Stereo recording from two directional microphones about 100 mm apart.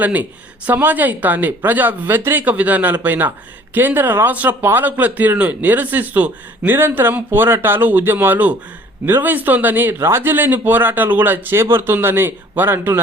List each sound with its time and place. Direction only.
0.0 s speech: 15° right (ahead or behind)